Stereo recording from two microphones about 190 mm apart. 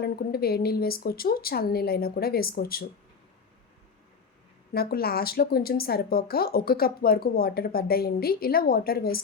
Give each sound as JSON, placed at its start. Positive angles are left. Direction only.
{"t": 0.0, "sound": "a woman's voice", "side_deg": 55}
{"t": 4.7, "sound": "a woman's voice", "side_deg": 55}